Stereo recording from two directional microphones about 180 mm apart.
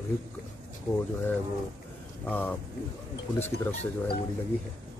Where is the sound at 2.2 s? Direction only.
10° left (ahead or behind).